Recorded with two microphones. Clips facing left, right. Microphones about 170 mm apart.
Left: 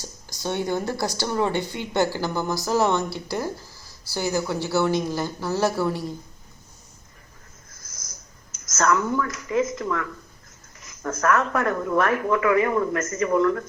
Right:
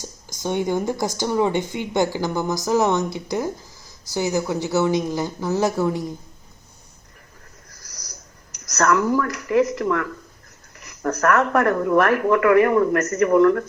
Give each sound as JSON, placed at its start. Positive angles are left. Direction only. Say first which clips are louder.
{"t": 0.4, "sound": "speech", "louder": "right 3 dB", "side_deg": -15}
{"t": 7.7, "sound": "a sound", "louder": "right 2 dB", "side_deg": -70}
{"t": 8.7, "sound": "speech", "louder": "right 3 dB", "side_deg": -70}